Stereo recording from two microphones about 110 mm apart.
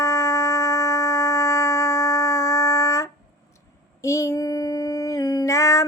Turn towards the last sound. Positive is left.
turn(degrees=30)  # may be behind; listen again after turning